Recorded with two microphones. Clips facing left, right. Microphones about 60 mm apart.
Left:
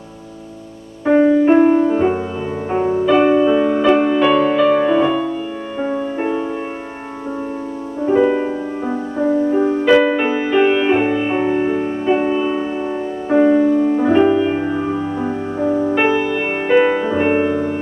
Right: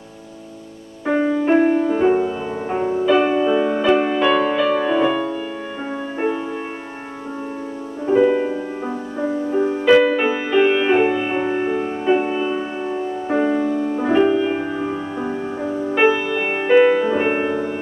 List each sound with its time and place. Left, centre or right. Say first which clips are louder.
1.0 s music: left 6 dB; centre
8.0 s music: left 1 dB; centre